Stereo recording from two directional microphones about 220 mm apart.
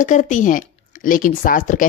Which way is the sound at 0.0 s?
35° left (ahead or behind).